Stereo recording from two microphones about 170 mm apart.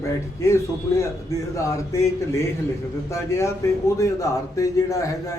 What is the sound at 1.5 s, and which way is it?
A man's voice, 20° left (ahead or behind).